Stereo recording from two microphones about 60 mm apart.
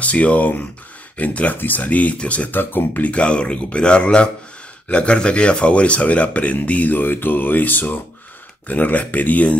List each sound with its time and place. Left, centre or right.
0.0 s speech: left
2.5 s speech: left